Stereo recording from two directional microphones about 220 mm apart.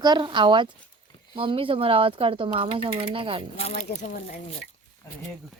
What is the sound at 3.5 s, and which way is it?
Speech, 30° left (ahead or behind).